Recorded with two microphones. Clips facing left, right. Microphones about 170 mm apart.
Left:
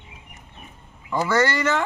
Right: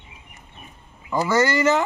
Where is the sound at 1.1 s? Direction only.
10° right (ahead or behind).